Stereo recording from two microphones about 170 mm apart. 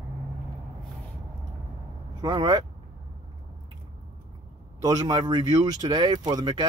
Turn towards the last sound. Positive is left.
turn(degrees=-25)  # may be behind; listen again after turning